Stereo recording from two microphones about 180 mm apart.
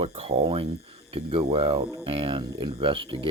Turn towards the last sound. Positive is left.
turn(degrees=-30)  # may be behind; listen again after turning